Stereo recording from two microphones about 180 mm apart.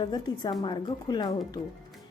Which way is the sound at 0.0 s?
25° left (ahead or behind).